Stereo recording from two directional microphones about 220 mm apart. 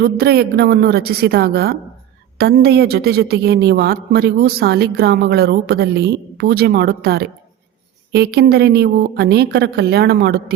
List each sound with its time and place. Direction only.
0.0 s a woman's voice: 45° right (ahead or behind)